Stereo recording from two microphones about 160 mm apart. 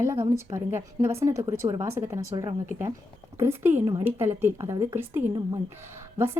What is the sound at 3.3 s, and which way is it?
Speech, 15° right (ahead or behind).